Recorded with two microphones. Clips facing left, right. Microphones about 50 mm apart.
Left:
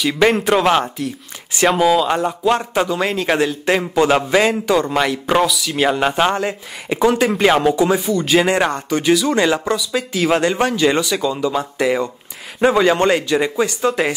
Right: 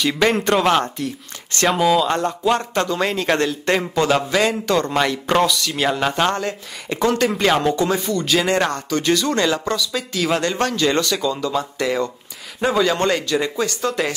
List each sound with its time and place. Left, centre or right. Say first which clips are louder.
0.0 s speech: left 2 dB; centre
3.9 s speech: left 6 dB; centre
9.4 s speech: left 3 dB; centre
9.9 s speech: left 6 dB; centre